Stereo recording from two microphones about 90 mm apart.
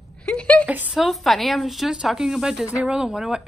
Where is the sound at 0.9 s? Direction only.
Centre (ahead or behind).